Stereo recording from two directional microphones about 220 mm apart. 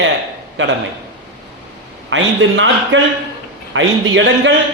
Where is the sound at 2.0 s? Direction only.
60° right (ahead or behind).